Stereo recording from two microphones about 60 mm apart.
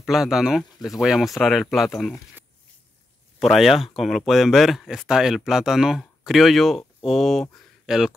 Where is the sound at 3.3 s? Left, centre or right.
Centre.